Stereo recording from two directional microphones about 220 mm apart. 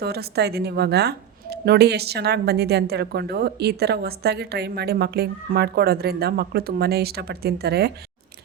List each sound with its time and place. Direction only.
0.0 s a woman's voice: 45° right (ahead or behind)